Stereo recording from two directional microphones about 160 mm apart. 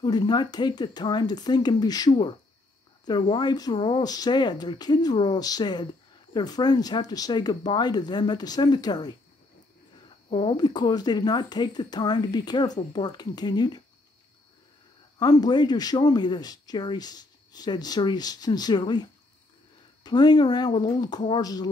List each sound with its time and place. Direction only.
0.0 s speech: 25° left (ahead or behind)
10.3 s speech: 30° left (ahead or behind)
15.1 s speech: 25° left (ahead or behind)